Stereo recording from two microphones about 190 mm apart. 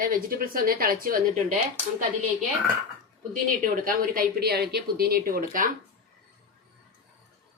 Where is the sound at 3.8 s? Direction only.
50° right (ahead or behind).